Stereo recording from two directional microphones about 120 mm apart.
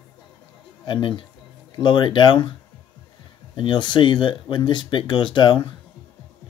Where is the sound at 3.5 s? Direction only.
40° left (ahead or behind).